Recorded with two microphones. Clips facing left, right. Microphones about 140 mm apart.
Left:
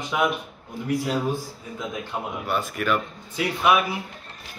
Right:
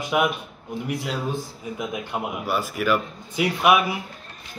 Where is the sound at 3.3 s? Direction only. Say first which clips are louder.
Right 2 dB; 15° right (ahead or behind).